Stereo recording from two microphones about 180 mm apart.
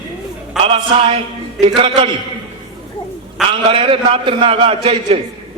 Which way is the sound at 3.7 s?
30° right (ahead or behind).